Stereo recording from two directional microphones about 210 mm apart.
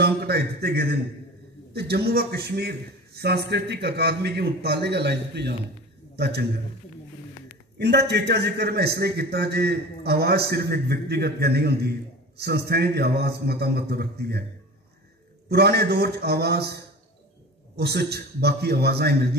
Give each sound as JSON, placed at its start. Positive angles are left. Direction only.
{"t": 0.0, "sound": "a man's voice", "side_deg": -50}
{"t": 7.8, "sound": "a man's voice", "side_deg": -55}
{"t": 15.5, "sound": "a man's voice", "side_deg": -50}